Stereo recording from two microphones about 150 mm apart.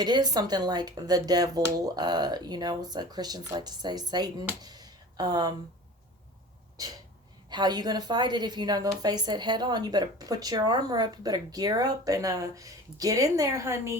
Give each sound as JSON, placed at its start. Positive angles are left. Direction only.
{"t": 0.0, "sound": "speech", "side_deg": -25}
{"t": 4.6, "sound": "a sound", "side_deg": -25}
{"t": 6.8, "sound": "speech", "side_deg": -25}